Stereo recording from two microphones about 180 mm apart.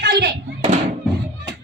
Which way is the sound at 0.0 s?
70° right (ahead or behind).